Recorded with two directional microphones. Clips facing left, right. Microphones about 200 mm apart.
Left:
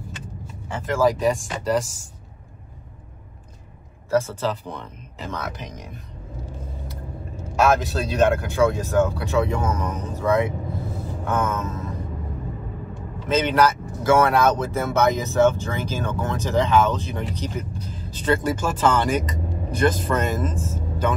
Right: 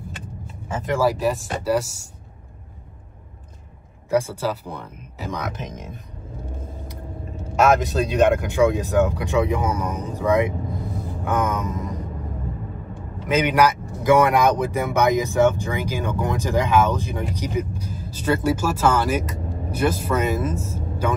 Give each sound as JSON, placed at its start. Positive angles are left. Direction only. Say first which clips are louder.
{"t": 0.8, "sound": "speech", "louder": "left 1 dB", "side_deg": -15}
{"t": 1.2, "sound": "speech", "louder": "even", "side_deg": -5}
{"t": 4.1, "sound": "speech", "louder": "even", "side_deg": -10}
{"t": 6.5, "sound": "vehicle", "louder": "right 1 dB", "side_deg": -50}
{"t": 7.8, "sound": "speech", "louder": "right 2 dB", "side_deg": -15}
{"t": 13.3, "sound": "speech", "louder": "right 1 dB", "side_deg": -15}